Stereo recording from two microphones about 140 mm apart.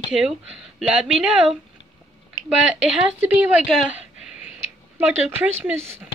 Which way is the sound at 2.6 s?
5° right (ahead or behind).